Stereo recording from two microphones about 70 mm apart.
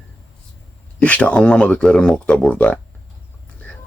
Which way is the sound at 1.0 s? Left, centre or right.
Left.